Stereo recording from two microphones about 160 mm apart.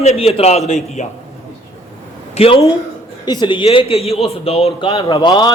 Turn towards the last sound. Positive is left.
turn(degrees=25)  # may be behind; listen again after turning